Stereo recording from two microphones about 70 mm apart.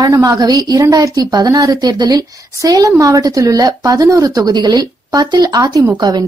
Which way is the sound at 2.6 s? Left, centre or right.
Right.